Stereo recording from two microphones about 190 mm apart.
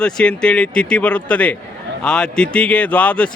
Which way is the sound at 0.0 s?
5° left (ahead or behind).